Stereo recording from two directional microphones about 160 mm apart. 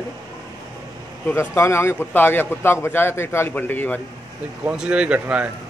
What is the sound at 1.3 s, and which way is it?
Speech, 15° left (ahead or behind).